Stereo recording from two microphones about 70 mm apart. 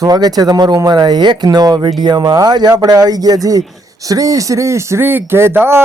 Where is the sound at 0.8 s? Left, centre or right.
Right.